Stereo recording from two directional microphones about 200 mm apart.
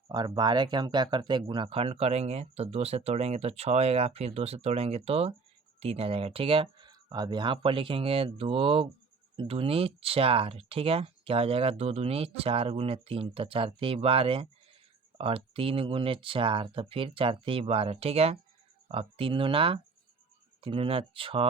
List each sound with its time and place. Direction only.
0.1 s speech: 20° right (ahead or behind)